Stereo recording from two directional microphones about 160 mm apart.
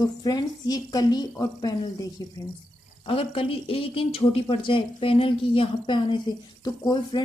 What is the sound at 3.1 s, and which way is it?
Speech, 35° left (ahead or behind).